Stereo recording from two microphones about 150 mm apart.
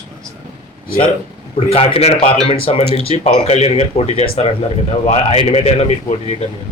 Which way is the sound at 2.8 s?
40° right (ahead or behind).